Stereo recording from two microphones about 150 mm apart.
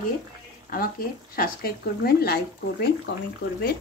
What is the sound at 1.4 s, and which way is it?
Speech, 90° left.